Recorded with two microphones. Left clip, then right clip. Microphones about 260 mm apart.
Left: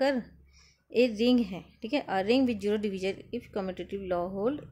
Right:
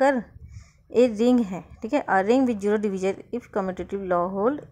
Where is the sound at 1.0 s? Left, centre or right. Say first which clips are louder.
Right 5 dB; centre.